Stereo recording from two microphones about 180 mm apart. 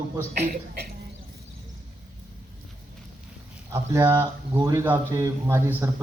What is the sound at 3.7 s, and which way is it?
Speech, 15° right (ahead or behind).